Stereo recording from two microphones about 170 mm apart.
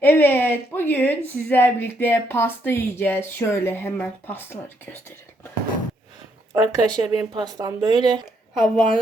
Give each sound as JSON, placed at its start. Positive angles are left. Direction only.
{"t": 0.0, "sound": "a woman's voice", "side_deg": 10}
{"t": 6.5, "sound": "speech", "side_deg": -20}
{"t": 8.5, "sound": "speech", "side_deg": 0}